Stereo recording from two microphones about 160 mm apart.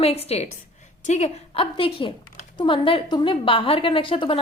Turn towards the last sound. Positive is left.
turn(degrees=35)  # may be behind; listen again after turning